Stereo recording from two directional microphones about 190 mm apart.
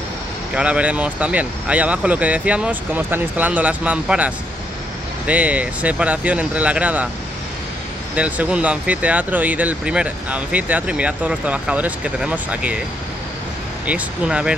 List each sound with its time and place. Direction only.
0.6 s speech: 5° right (ahead or behind)
8.2 s speech: 5° right (ahead or behind)
13.8 s speech: 5° right (ahead or behind)